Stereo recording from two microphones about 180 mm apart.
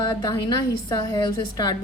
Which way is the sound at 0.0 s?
20° left (ahead or behind).